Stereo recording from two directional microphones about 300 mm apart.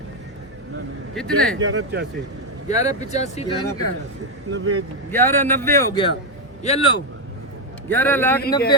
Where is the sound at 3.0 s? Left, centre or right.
Left.